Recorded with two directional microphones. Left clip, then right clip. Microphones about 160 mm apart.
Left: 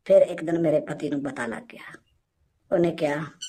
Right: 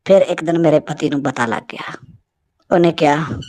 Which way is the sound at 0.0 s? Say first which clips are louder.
Right 6 dB; 40° right (ahead or behind).